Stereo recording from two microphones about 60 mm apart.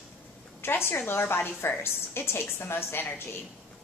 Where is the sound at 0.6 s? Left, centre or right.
Left.